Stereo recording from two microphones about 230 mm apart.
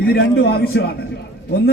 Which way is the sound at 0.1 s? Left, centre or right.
Left.